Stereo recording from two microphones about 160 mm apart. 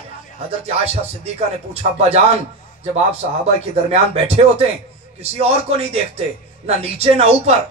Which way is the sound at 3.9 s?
40° right (ahead or behind).